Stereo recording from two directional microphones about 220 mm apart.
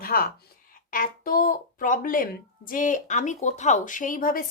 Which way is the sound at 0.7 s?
40° left (ahead or behind).